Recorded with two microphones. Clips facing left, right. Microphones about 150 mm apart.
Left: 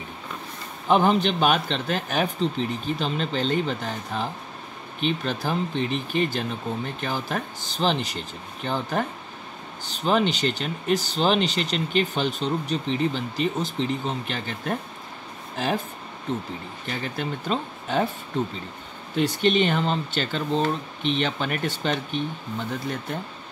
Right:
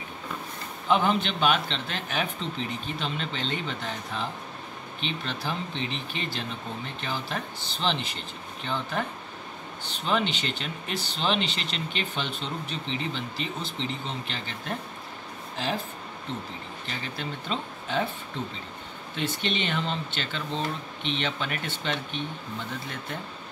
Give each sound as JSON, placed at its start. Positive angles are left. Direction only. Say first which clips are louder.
{"t": 0.8, "sound": "speech", "louder": "left 4 dB", "side_deg": 45}
{"t": 19.1, "sound": "speech", "louder": "left 9 dB", "side_deg": 45}